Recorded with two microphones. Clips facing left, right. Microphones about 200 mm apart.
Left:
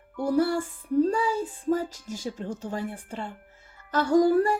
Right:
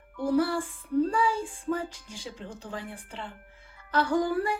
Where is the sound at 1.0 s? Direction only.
40° left (ahead or behind).